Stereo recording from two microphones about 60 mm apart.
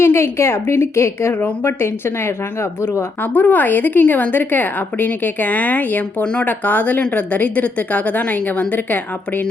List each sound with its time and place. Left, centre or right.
0.0 s a woman's voice: left
1.3 s a woman's voice: left
1.8 s a woman's voice: left
3.3 s a woman's voice: left